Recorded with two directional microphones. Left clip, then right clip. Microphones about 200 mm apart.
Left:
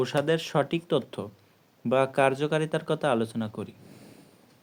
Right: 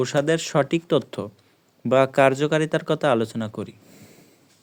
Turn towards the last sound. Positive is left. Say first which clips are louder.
# right 5 dB
turn(degrees=-40)  # may be behind; listen again after turning